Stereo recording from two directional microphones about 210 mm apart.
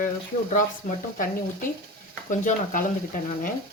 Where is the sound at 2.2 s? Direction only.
35° left (ahead or behind).